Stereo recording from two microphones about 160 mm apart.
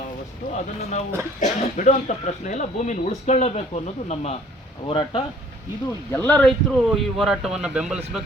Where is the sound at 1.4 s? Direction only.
50° left (ahead or behind).